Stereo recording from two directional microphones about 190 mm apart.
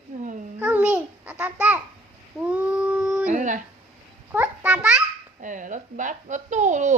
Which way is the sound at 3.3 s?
40° right (ahead or behind).